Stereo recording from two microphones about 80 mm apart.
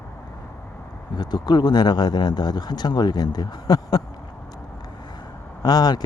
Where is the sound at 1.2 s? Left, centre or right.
Left.